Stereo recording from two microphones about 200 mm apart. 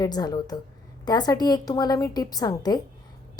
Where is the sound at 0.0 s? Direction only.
20° left (ahead or behind).